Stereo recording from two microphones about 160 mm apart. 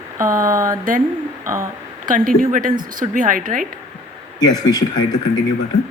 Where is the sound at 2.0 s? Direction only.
55° right (ahead or behind).